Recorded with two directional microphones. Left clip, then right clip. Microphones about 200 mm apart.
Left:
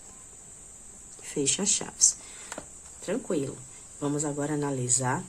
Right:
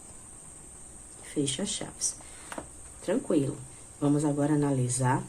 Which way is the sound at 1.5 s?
40° left (ahead or behind).